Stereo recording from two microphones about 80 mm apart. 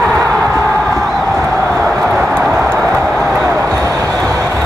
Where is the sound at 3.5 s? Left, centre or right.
Right.